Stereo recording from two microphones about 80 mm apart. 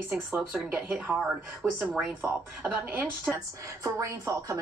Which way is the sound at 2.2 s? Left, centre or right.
Right.